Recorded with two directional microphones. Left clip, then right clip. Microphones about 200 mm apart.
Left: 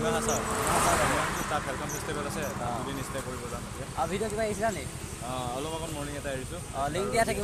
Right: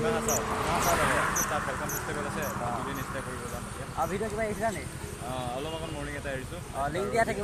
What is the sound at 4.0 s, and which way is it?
Speech, 5° left (ahead or behind).